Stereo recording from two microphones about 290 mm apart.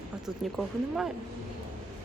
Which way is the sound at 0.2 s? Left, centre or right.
Centre.